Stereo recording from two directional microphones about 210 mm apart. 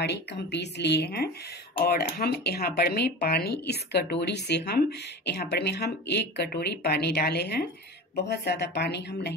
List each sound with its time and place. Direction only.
0.0 s speech: 55° left (ahead or behind)